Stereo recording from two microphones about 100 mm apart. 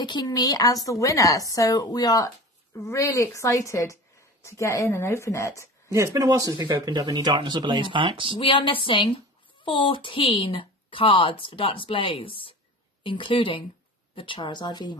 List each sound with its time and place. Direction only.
0.0 s a woman's voice: 45° left (ahead or behind); by 5.7 s 30° left (ahead or behind)
5.9 s speech: 35° right (ahead or behind); by 8.4 s 55° right (ahead or behind)
8.4 s speech: 60° left (ahead or behind); by 15.0 s 45° left (ahead or behind)